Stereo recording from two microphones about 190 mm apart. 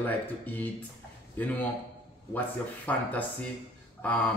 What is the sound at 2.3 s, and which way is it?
Speech, 10° left (ahead or behind).